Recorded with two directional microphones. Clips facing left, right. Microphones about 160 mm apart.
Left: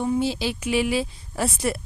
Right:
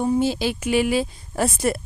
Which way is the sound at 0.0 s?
45° right (ahead or behind).